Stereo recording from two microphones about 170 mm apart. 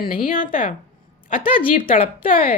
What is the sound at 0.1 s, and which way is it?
Speech, 55° left (ahead or behind).